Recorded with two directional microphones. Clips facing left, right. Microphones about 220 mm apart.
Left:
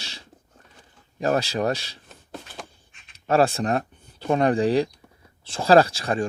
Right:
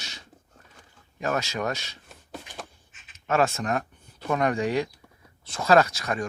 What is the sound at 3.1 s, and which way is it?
Speech, 35° left (ahead or behind).